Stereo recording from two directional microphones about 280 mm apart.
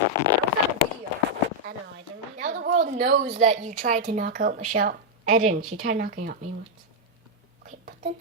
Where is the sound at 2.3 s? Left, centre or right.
Right.